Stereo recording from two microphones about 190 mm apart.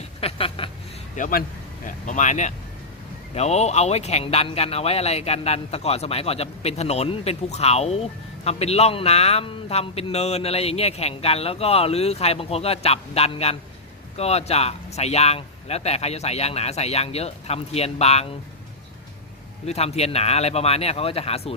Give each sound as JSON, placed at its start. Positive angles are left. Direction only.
{"t": 0.2, "sound": "a sound", "side_deg": 30}
{"t": 1.1, "sound": "a man's voice", "side_deg": 45}
{"t": 19.6, "sound": "a man's voice", "side_deg": 35}